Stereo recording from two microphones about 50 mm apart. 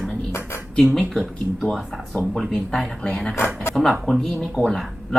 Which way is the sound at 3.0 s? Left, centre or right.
Left.